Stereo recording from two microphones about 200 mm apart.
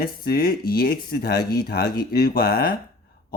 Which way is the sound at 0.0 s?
50° left (ahead or behind).